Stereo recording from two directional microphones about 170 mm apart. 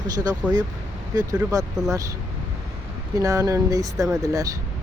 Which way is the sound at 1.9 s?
20° right (ahead or behind).